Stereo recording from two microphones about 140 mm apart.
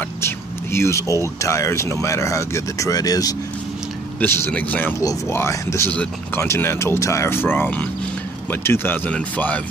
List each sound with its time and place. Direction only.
0.2 s speech: 20° left (ahead or behind)
4.2 s speech: 15° left (ahead or behind)